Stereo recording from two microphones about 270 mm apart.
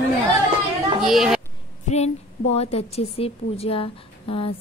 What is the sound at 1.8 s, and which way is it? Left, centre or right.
A woman's voice, left.